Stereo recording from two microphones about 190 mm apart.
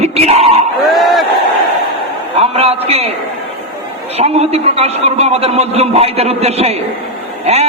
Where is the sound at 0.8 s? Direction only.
Centre (ahead or behind).